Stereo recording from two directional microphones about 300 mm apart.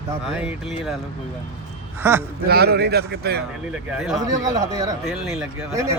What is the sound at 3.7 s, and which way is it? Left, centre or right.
Speech, centre.